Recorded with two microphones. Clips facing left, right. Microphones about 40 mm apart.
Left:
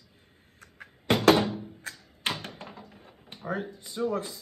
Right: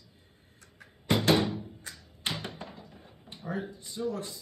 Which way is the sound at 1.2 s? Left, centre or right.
Left.